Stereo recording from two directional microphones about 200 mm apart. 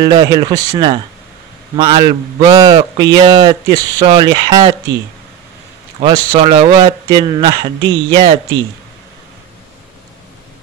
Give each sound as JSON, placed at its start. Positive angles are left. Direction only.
{"t": 0.0, "sound": "speech", "side_deg": -20}
{"t": 5.9, "sound": "speech", "side_deg": -25}